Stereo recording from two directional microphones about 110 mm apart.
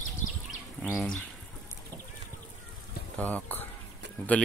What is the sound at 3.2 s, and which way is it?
Speech, 15° left (ahead or behind).